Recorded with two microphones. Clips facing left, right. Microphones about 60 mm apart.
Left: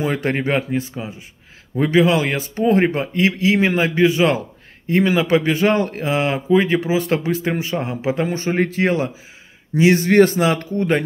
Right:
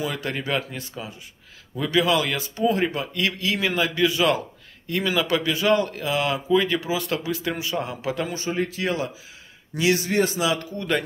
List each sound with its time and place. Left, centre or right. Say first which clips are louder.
0.0 s speech: left 7 dB; left
8.5 s speech: left 7 dB; left
10.0 s speech: left 8 dB; left